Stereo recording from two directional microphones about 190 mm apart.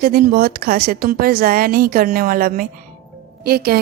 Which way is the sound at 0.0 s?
50° right (ahead or behind).